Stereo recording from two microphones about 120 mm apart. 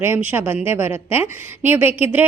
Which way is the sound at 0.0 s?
20° right (ahead or behind).